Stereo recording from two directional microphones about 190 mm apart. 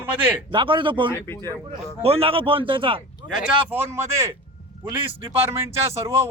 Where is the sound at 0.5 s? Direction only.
25° right (ahead or behind).